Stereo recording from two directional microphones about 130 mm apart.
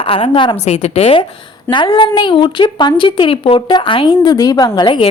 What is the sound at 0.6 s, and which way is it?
Speech, 55° left (ahead or behind).